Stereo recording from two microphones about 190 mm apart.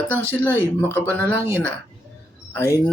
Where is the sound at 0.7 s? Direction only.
10° left (ahead or behind).